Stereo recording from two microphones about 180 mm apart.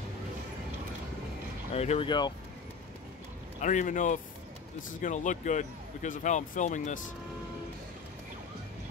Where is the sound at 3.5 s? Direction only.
45° left (ahead or behind).